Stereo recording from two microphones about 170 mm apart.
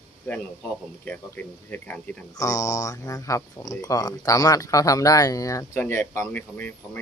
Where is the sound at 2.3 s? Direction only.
20° left (ahead or behind).